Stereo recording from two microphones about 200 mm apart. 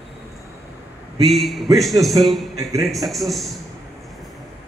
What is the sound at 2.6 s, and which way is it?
Speech, 15° right (ahead or behind).